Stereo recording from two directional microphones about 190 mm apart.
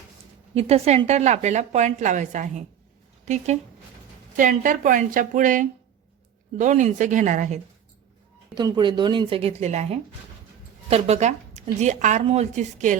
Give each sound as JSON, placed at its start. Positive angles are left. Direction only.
{"t": 0.5, "sound": "a woman's voice", "side_deg": -35}
{"t": 8.5, "sound": "a woman's voice", "side_deg": -20}